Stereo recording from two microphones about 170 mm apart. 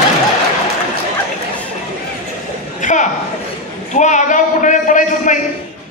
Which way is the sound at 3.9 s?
45° left (ahead or behind).